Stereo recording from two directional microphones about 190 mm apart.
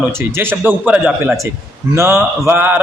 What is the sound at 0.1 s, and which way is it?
A man's voice, 15° right (ahead or behind).